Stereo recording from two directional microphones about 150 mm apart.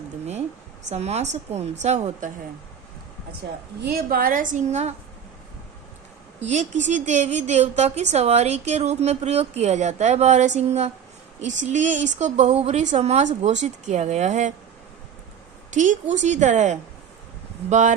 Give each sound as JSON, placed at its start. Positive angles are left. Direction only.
{"t": 0.9, "sound": "a woman's voice", "side_deg": -45}
{"t": 3.8, "sound": "a woman's voice", "side_deg": -90}
{"t": 6.4, "sound": "a woman's voice", "side_deg": -55}
{"t": 15.7, "sound": "a woman's voice", "side_deg": -55}